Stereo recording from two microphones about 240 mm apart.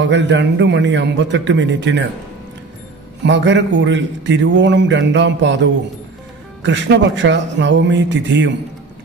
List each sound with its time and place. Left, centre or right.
0.0 s a man's voice: right
3.3 s a man's voice: right